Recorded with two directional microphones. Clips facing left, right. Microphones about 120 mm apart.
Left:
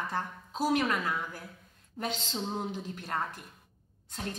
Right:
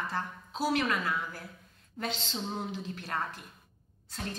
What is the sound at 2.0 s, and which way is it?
A woman's voice, 10° left (ahead or behind).